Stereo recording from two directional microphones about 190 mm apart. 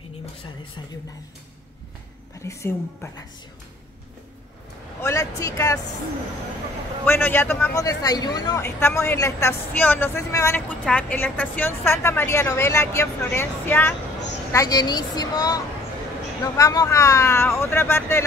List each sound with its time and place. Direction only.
2.4 s speech: 15° left (ahead or behind)
5.0 s speech: 15° left (ahead or behind)
7.1 s speech: 10° left (ahead or behind)